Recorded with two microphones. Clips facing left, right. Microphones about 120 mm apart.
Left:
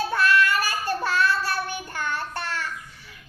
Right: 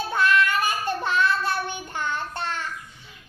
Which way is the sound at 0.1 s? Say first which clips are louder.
Right 2 dB; 20° right (ahead or behind).